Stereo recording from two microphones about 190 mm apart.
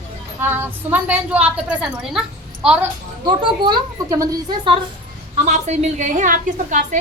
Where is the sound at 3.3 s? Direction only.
25° right (ahead or behind).